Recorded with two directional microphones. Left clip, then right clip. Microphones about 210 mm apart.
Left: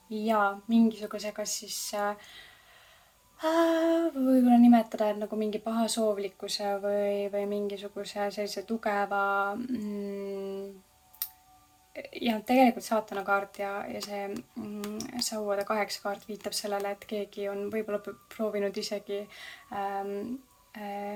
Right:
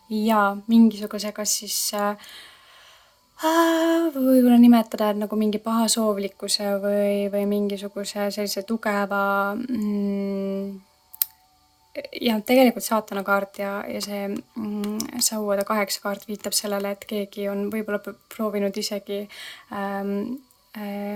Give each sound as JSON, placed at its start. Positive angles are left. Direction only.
{"t": 0.1, "sound": "speech", "side_deg": -45}
{"t": 11.9, "sound": "speech", "side_deg": -45}